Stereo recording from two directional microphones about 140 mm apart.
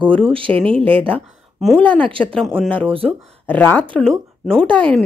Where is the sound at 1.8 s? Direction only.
10° left (ahead or behind).